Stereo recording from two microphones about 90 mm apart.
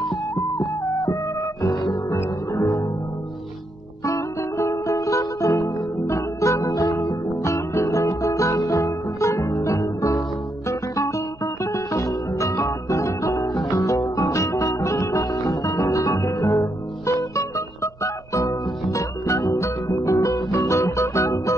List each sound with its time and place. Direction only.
1.6 s music: 45° left (ahead or behind)
2.0 s music: 30° left (ahead or behind)
4.0 s music: 35° left (ahead or behind)